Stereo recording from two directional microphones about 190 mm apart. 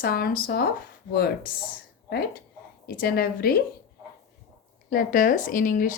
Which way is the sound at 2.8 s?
55° left (ahead or behind).